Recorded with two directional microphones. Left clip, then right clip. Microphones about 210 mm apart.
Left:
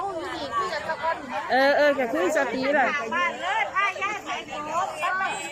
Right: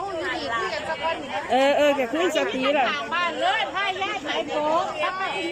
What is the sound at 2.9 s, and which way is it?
Chatter, 55° right (ahead or behind).